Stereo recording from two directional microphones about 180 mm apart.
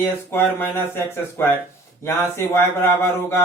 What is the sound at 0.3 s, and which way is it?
Speech, 10° left (ahead or behind).